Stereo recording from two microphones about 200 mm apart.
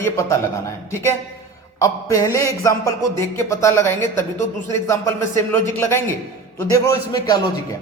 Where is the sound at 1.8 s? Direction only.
15° left (ahead or behind).